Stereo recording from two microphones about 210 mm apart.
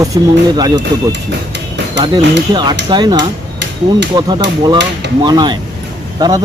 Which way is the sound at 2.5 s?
20° right (ahead or behind).